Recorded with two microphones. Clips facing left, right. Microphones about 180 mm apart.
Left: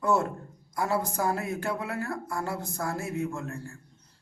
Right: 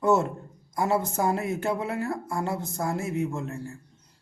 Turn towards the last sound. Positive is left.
turn(degrees=-20)  # may be behind; listen again after turning